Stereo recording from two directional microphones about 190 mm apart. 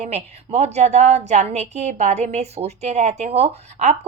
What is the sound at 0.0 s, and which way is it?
A woman's voice, 35° right (ahead or behind).